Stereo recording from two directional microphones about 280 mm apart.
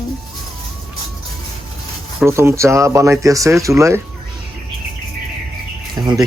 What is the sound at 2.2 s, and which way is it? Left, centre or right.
Speech, centre.